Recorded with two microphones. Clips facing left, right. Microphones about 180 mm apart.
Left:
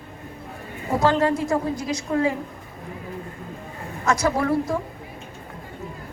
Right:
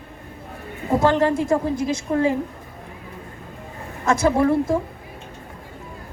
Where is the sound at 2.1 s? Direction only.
30° right (ahead or behind).